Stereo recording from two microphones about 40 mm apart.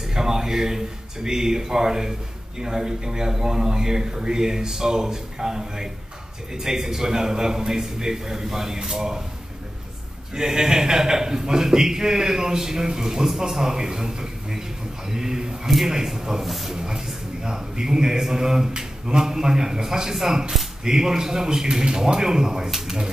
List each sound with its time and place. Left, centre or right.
0.1 s a man's voice: centre
10.3 s a man's voice: centre
16.7 s a man's voice: centre